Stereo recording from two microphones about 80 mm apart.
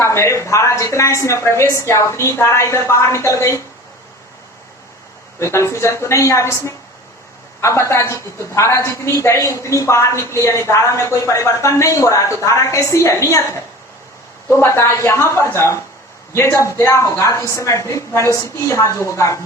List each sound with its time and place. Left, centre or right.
0.0 s a woman's voice: left
5.4 s a woman's voice: left
14.5 s a woman's voice: left